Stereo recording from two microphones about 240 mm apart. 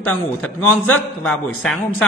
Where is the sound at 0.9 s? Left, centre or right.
Centre.